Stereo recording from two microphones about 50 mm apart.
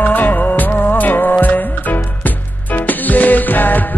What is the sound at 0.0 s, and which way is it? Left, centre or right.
Music, left.